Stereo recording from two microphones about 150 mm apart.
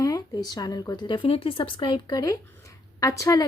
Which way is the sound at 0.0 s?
25° left (ahead or behind).